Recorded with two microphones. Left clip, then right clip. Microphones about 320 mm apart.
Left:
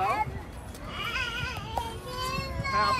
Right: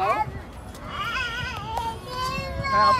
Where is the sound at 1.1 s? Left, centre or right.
Centre.